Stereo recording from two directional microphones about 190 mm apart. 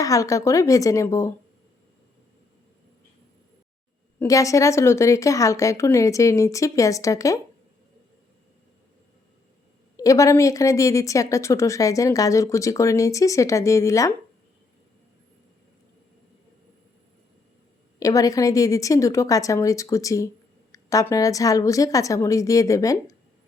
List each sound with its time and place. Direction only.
0.0 s a woman's voice: 15° left (ahead or behind)
4.2 s a woman's voice: 15° left (ahead or behind)
10.0 s a woman's voice: 15° left (ahead or behind)
18.0 s a woman's voice: 20° left (ahead or behind)